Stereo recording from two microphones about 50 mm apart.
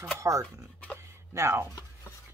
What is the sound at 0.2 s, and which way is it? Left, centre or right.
Speech, right.